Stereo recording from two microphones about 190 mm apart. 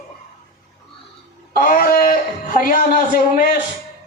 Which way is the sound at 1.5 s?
50° left (ahead or behind).